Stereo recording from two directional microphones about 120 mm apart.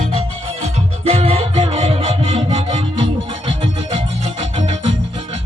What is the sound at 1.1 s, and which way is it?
Music, 55° right (ahead or behind).